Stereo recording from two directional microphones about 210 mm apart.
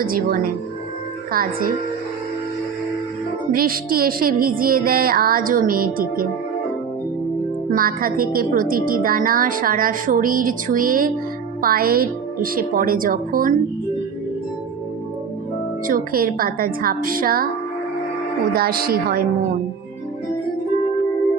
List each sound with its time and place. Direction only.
0.0 s music: 45° right (ahead or behind)
3.5 s music: 45° right (ahead or behind)
7.7 s a woman's voice: 45° right (ahead or behind)
11.6 s music: 45° right (ahead or behind)
15.9 s music: 45° right (ahead or behind)
18.5 s music: 45° right (ahead or behind)